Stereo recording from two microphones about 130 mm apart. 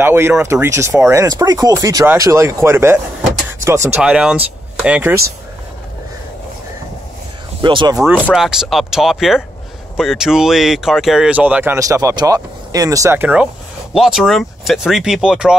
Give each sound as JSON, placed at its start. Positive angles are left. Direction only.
{"t": 0.0, "sound": "speech", "side_deg": -15}
{"t": 1.2, "sound": "speech", "side_deg": -30}
{"t": 4.0, "sound": "speech", "side_deg": -5}
{"t": 7.6, "sound": "speech", "side_deg": -35}
{"t": 8.4, "sound": "speech", "side_deg": -5}